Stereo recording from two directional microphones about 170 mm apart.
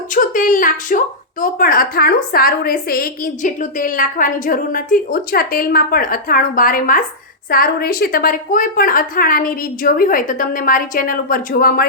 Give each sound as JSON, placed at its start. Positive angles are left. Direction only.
{"t": 0.1, "sound": "speech", "side_deg": 50}